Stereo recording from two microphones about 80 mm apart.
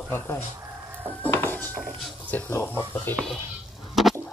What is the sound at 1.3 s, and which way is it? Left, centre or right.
Mechanisms, left.